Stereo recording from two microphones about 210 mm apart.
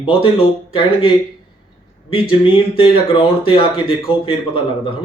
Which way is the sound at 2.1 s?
25° left (ahead or behind).